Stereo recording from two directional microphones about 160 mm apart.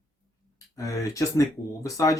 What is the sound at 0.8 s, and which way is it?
Speech, 20° left (ahead or behind).